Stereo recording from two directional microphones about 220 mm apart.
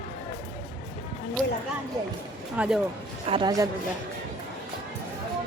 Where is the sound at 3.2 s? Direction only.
20° right (ahead or behind).